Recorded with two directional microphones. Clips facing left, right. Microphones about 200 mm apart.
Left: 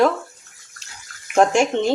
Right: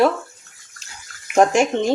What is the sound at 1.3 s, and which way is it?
Speech, 5° right (ahead or behind).